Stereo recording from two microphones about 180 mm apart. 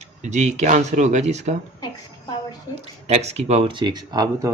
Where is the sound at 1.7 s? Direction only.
25° left (ahead or behind).